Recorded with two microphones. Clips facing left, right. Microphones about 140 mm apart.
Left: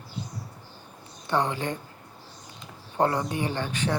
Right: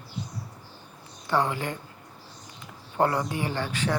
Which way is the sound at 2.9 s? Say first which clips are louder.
Even; 20° left (ahead or behind).